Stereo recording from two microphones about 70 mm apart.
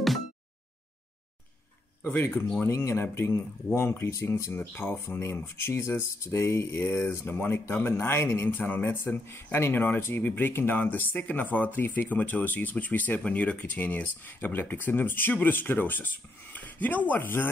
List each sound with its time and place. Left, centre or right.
2.6 s speech: left